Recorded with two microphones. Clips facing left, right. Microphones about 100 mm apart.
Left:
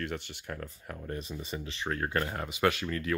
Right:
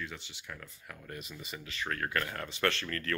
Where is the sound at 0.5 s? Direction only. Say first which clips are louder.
Left 7 dB; 35° left (ahead or behind).